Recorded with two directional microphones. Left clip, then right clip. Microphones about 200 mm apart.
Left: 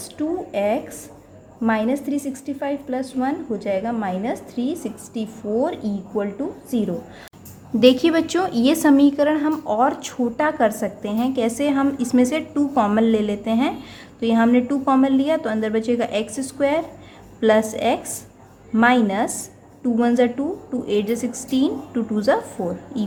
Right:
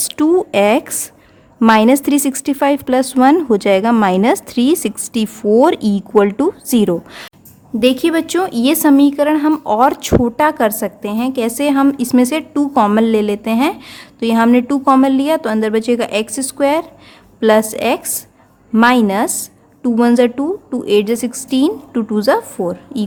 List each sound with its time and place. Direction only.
0.1 s a woman's voice: 45° right (ahead or behind)
7.8 s a woman's voice: 25° right (ahead or behind)